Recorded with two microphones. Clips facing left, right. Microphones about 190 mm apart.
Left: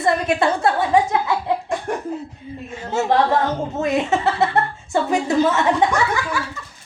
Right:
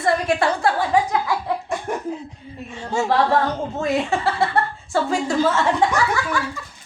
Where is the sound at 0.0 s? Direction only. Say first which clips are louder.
Left 1 dB; 20° left (ahead or behind).